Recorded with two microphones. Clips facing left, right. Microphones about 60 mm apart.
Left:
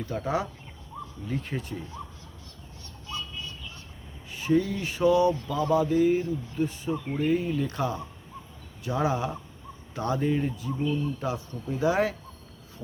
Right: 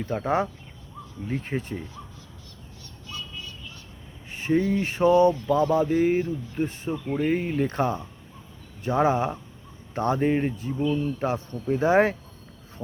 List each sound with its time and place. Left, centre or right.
0.0 s mantra: right
3.1 s music: left
4.3 s mantra: right